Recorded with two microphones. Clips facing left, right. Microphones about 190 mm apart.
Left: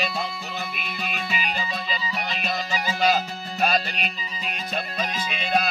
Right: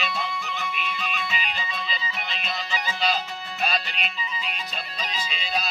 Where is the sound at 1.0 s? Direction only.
45° left (ahead or behind).